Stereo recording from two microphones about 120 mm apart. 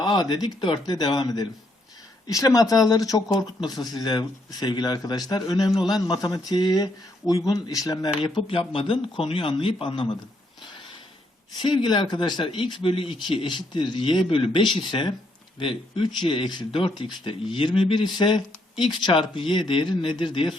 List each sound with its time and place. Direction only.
0.0 s speech: 40° left (ahead or behind)
8.2 s speech: 45° left (ahead or behind)
11.5 s speech: 40° left (ahead or behind)